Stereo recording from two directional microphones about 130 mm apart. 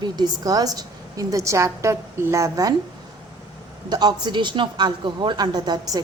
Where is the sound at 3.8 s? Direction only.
35° right (ahead or behind).